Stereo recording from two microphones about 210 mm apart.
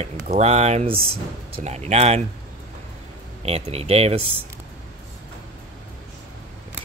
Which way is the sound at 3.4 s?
30° right (ahead or behind).